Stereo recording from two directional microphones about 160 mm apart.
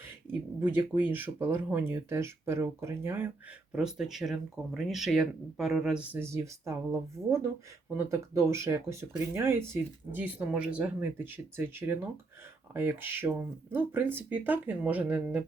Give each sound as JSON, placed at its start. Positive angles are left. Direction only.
{"t": 0.3, "sound": "speech", "side_deg": -10}
{"t": 3.7, "sound": "speech", "side_deg": -5}
{"t": 7.9, "sound": "speech", "side_deg": -15}